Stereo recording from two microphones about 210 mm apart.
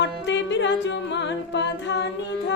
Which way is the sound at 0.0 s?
60° left (ahead or behind).